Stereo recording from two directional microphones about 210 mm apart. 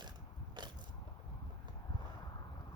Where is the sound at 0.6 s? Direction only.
20° right (ahead or behind).